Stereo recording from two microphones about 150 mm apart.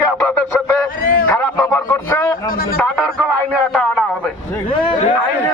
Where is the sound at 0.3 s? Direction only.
10° left (ahead or behind).